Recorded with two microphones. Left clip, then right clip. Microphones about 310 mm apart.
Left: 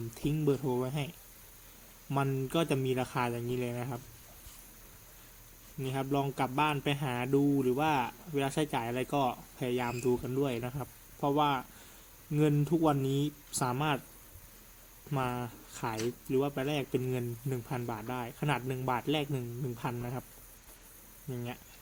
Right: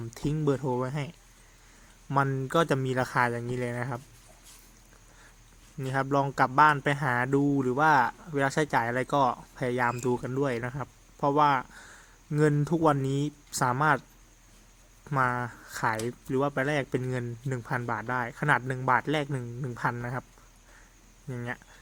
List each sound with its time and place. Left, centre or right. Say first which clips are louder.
0.1 s a man's voice: right 3 dB; centre
5.8 s a man's voice: right 6 dB; centre
13.1 s speech: right 2 dB; right
13.5 s a man's voice: right 9 dB; centre
15.1 s a man's voice: right 8 dB; centre
21.3 s a man's voice: right 6 dB; centre